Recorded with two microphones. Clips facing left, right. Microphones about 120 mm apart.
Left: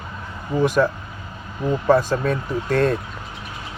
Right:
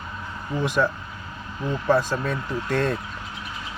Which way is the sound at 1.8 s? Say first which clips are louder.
Left 4 dB; 50° left (ahead or behind).